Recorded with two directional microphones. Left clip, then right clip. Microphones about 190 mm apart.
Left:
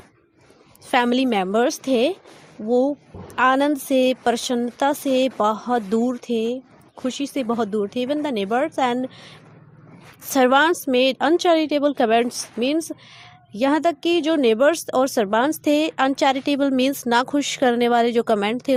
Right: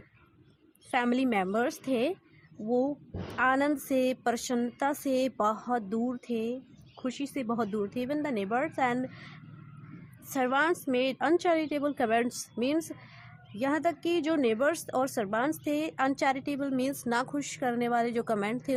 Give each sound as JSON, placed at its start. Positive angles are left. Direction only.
{"t": 0.9, "sound": "a woman's voice", "side_deg": 40}
{"t": 10.3, "sound": "a woman's voice", "side_deg": 40}